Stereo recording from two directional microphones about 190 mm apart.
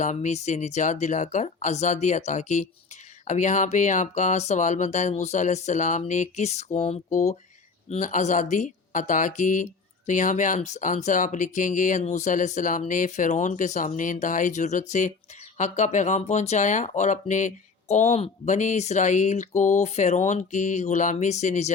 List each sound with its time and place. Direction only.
0.0 s speech: 40° left (ahead or behind)